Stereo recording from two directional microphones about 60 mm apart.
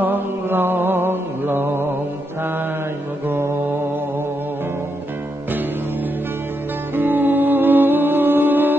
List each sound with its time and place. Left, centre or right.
0.0 s mantra: right
3.3 s mantra: right
7.0 s music: right